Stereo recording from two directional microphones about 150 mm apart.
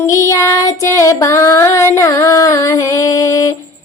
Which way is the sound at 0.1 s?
20° left (ahead or behind).